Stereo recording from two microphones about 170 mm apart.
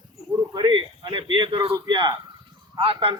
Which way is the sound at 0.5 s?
30° right (ahead or behind).